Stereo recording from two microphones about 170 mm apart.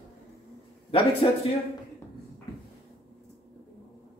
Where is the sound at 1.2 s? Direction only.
30° left (ahead or behind).